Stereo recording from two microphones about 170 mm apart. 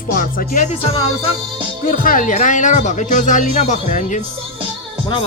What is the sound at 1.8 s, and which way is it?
Speech, 55° left (ahead or behind).